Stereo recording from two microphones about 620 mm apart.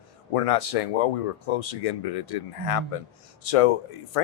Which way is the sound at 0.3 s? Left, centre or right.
Left.